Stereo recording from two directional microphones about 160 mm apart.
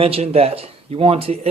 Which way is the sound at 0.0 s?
35° right (ahead or behind).